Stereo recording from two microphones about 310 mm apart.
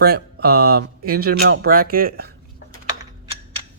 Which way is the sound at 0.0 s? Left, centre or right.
Right.